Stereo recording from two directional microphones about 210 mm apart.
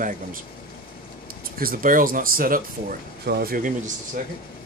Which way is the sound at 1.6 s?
40° right (ahead or behind).